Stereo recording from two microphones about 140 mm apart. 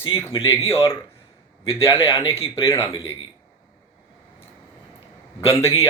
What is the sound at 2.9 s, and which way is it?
Speech, 35° left (ahead or behind).